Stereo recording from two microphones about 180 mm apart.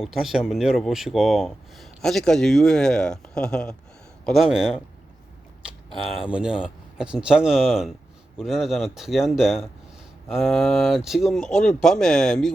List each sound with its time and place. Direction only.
0.0 s speech: centre (ahead or behind)
5.9 s speech: 5° right (ahead or behind)